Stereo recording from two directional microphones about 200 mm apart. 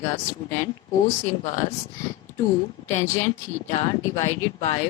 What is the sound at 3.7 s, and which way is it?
Speech, 25° left (ahead or behind).